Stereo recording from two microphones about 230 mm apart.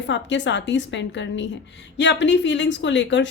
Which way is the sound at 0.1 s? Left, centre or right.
Left.